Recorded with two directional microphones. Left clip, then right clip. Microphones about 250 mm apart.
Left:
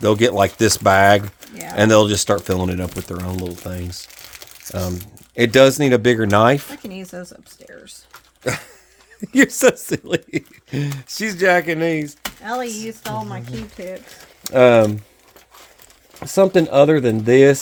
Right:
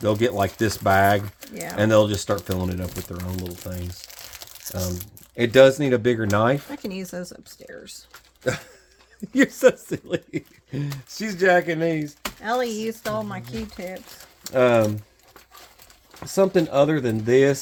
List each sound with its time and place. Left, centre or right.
0.0 s speech: left
4.1 s crumpling: centre
5.4 s speech: left
6.7 s speech: right
8.4 s a sound: left
9.3 s speech: left
12.4 s speech: right
14.4 s speech: left
16.2 s speech: left